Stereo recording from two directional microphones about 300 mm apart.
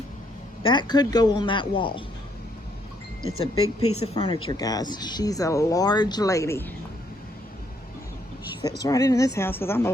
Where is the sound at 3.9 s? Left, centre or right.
Left.